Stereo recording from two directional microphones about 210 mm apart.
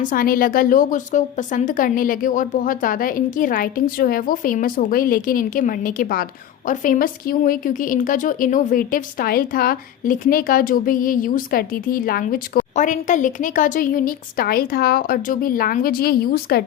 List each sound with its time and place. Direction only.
0.0 s speech: 40° left (ahead or behind)